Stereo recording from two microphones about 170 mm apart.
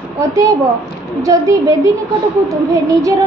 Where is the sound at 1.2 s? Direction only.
20° right (ahead or behind).